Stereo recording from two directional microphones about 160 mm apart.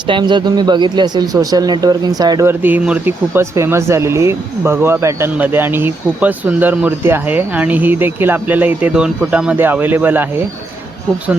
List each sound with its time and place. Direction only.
0.1 s speech: 30° right (ahead or behind)
2.5 s speech: 10° right (ahead or behind)